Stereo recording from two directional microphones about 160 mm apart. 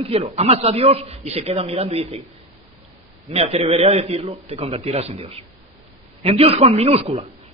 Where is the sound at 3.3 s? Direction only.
40° right (ahead or behind).